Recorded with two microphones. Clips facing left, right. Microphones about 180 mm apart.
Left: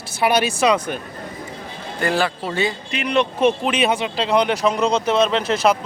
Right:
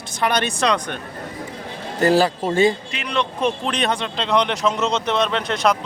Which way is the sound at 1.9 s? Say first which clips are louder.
Right 5 dB; 40° right (ahead or behind).